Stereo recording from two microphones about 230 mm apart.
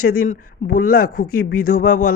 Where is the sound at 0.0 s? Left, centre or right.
Left.